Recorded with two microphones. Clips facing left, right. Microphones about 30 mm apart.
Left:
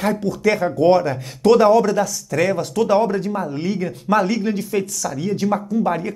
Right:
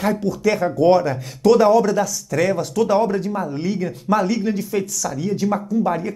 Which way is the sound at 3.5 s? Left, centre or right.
Left.